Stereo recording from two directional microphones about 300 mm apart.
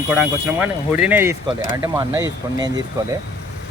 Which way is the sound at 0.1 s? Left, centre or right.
Centre.